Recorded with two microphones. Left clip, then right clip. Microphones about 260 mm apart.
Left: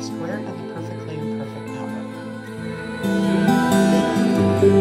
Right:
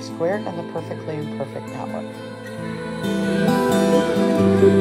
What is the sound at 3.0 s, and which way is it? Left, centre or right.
Music, centre.